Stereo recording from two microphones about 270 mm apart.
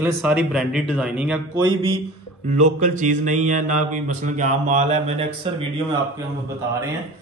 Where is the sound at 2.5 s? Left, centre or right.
Right.